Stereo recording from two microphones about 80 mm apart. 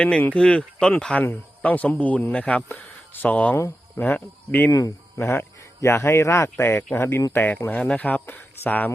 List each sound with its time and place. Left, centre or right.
0.0 s speech: centre
1.2 s a man's voice: left
4.7 s speech: left
7.3 s a man's voice: left